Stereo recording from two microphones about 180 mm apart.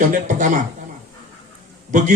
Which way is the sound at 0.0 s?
45° right (ahead or behind).